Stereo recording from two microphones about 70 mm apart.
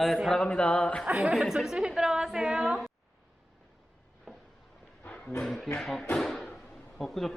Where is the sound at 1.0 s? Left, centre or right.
Centre.